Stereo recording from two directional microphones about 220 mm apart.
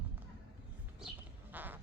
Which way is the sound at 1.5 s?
10° right (ahead or behind).